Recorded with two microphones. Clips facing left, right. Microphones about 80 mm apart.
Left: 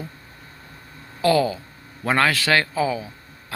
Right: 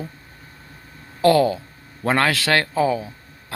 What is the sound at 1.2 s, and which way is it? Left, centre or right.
Speech, right.